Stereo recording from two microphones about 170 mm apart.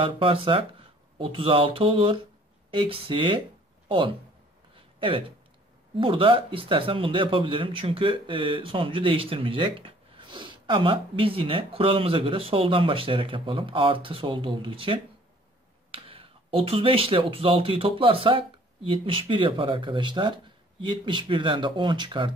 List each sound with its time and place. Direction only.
0.0 s speech: 30° right (ahead or behind)
4.7 s a sound: 30° right (ahead or behind)
5.9 s speech: 30° right (ahead or behind)